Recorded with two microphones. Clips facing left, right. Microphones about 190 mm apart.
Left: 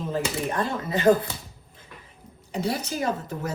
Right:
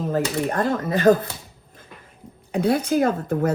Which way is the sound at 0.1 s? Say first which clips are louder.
Right 4 dB; 50° right (ahead or behind).